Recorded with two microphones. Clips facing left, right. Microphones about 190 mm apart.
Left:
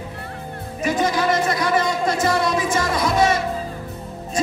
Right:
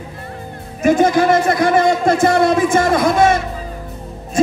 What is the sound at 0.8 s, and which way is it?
Speech, 50° right (ahead or behind).